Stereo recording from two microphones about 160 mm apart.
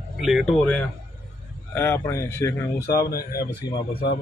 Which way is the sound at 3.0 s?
75° left (ahead or behind).